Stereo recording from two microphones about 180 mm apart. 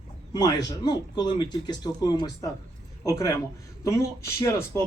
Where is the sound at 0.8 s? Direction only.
25° left (ahead or behind).